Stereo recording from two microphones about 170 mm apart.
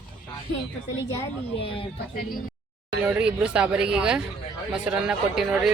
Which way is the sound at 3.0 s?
5° right (ahead or behind).